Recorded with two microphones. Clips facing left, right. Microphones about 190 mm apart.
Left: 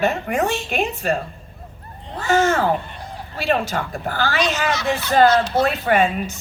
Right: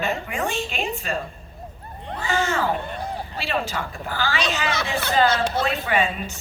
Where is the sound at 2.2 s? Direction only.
45° left (ahead or behind).